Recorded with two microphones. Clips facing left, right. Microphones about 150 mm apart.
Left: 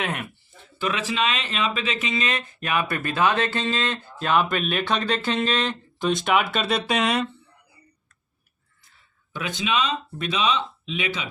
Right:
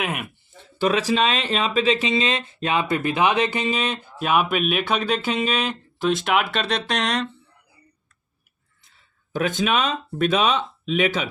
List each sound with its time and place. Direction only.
0.0 s speech: 10° right (ahead or behind)
0.8 s speech: 35° right (ahead or behind); by 7.3 s 5° left (ahead or behind)
9.3 s speech: 45° right (ahead or behind)